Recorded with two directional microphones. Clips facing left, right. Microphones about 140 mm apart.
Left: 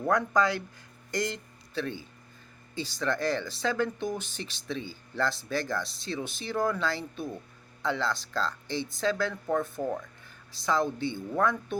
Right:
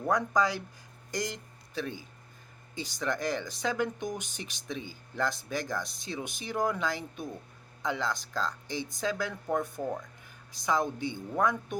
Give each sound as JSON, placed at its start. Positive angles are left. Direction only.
{"t": 0.1, "sound": "speech", "side_deg": -15}